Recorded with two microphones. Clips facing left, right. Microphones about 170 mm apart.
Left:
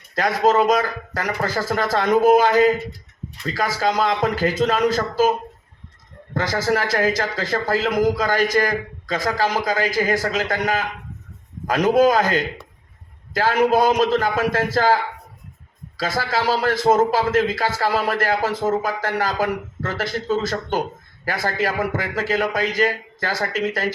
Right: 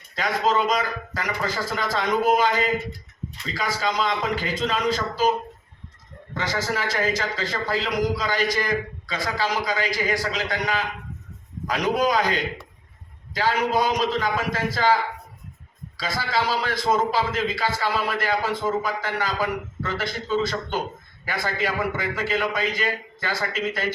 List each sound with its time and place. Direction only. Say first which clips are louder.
0.2 s a man's voice: left 5 dB; 45° left (ahead or behind)
6.3 s a man's voice: left 6 dB; 45° left (ahead or behind)
16.5 s a man's voice: left 9 dB; 45° left (ahead or behind)